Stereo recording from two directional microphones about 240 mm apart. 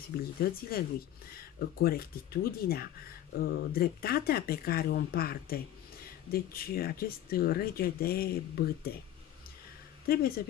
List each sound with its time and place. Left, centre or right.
0.4 s speech: left
10.0 s speech: left